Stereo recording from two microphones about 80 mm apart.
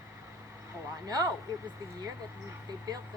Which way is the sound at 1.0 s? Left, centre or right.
Right.